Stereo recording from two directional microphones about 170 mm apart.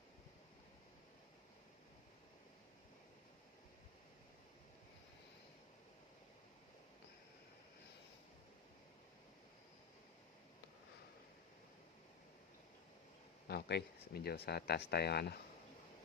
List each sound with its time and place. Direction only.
13.5 s speech: 70° left (ahead or behind)